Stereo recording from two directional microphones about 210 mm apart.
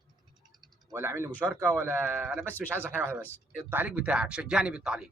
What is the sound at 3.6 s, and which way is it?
Speech, 10° right (ahead or behind).